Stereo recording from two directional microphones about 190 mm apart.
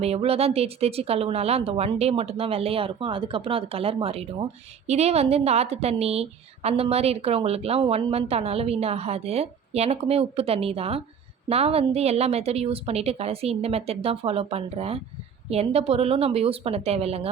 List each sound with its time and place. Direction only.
0.0 s a woman's voice: 30° right (ahead or behind)